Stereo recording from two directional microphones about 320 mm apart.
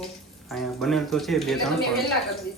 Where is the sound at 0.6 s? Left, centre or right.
Centre.